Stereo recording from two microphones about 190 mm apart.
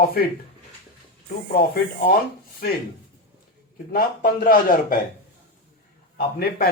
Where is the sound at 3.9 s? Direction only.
50° left (ahead or behind).